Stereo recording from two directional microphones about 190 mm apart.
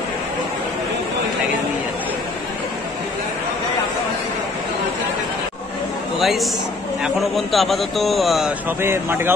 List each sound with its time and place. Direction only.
6.1 s a man's voice: centre (ahead or behind)
8.8 s speech: 15° right (ahead or behind)